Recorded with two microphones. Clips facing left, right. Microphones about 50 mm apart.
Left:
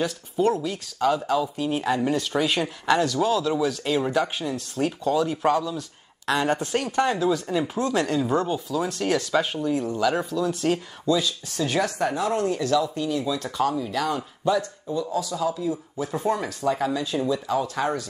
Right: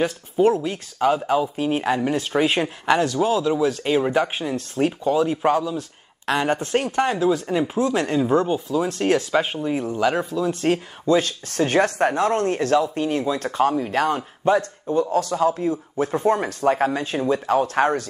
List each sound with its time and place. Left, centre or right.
0.0 s speech: right
5.8 s speech: right; by 8.9 s centre
8.9 s speech: right
10.6 s speech: right